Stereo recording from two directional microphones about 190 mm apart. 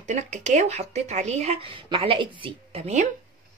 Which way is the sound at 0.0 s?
40° right (ahead or behind).